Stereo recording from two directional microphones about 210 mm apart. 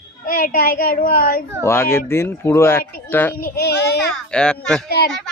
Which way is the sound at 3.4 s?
45° left (ahead or behind).